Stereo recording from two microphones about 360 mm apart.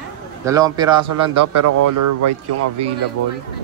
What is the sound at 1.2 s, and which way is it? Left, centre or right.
A man's voice, right.